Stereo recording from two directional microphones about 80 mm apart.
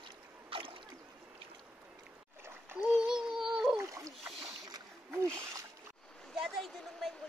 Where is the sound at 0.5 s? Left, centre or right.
Right.